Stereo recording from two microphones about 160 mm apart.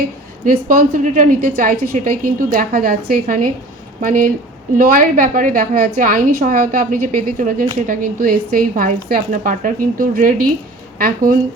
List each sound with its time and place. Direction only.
0.4 s a woman's voice: 60° right (ahead or behind)